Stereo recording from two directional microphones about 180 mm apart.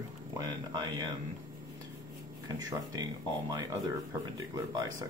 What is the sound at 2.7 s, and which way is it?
Speech, 20° right (ahead or behind).